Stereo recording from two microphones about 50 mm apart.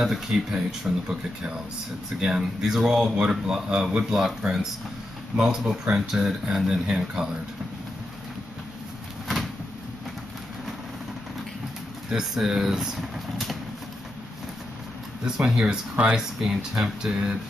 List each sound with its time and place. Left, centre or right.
0.0 s speech: centre
2.1 s speech: centre
12.2 s speech: centre
15.2 s speech: centre
16.2 s speech: centre